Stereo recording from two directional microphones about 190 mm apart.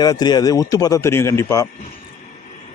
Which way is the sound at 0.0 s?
20° left (ahead or behind).